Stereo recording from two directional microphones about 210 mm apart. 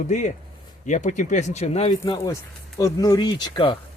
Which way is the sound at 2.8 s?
15° left (ahead or behind).